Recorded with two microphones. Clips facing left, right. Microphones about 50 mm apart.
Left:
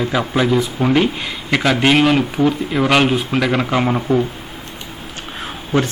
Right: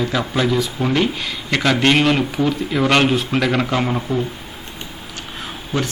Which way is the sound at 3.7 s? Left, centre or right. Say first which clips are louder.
Left 4 dB; centre.